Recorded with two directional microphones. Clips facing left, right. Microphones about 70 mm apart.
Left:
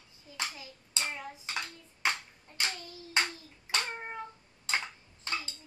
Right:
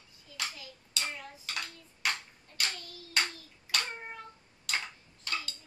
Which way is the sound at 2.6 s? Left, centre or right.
Left.